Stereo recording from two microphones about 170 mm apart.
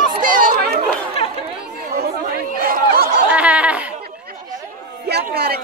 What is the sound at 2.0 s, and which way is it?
Chatter, 60° right (ahead or behind).